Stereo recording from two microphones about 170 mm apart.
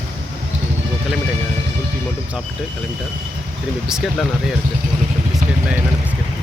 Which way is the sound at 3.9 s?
Centre (ahead or behind).